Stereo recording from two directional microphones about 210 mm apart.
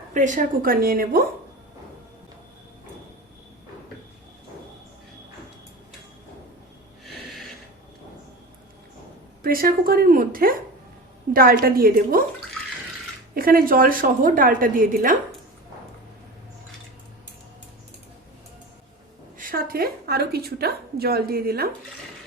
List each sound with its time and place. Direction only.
0.1 s a woman's voice: 35° right (ahead or behind)
7.0 s snort: centre (ahead or behind)
9.4 s a woman's voice: 45° right (ahead or behind)
13.3 s a woman's voice: 45° right (ahead or behind)
19.4 s a woman's voice: 45° right (ahead or behind)